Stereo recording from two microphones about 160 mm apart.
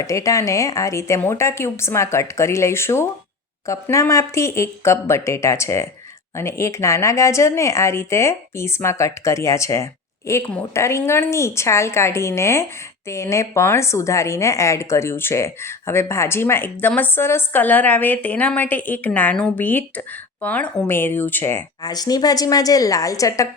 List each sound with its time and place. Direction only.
0.0 s a woman's voice: 20° left (ahead or behind)